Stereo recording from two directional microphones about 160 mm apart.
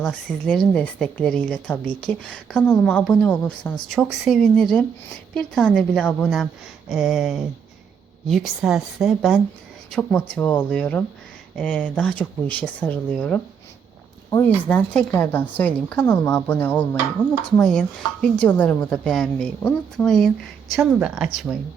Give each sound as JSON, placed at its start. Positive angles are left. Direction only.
{"t": 0.0, "sound": "a woman's voice", "side_deg": 5}
{"t": 14.3, "sound": "speech", "side_deg": 20}
{"t": 14.7, "sound": "a woman's voice", "side_deg": 5}